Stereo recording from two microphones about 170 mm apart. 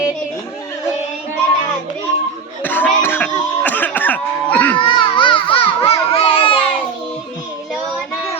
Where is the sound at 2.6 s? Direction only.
10° left (ahead or behind).